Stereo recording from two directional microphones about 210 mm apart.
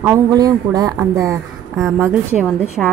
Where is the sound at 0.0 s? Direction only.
15° right (ahead or behind).